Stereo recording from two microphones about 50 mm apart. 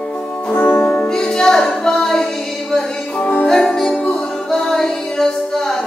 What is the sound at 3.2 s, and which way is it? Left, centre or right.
Music, left.